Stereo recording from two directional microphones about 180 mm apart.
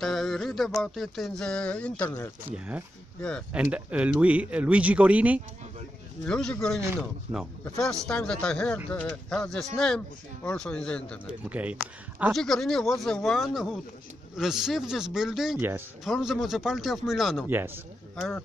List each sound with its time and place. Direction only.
0.0 s speech: centre (ahead or behind)
2.5 s speech: 5° right (ahead or behind)
3.2 s speech: 5° left (ahead or behind)
3.7 s speech: 5° right (ahead or behind)
6.2 s speech: 5° left (ahead or behind)
11.2 s speech: 10° right (ahead or behind)
17.5 s speech: 10° right (ahead or behind)